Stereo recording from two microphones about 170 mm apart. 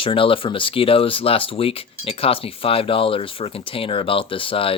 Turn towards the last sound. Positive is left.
turn(degrees=30)  # may be behind; listen again after turning